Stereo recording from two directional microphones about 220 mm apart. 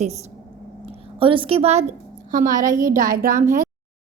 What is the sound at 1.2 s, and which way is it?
A woman's voice, 25° right (ahead or behind).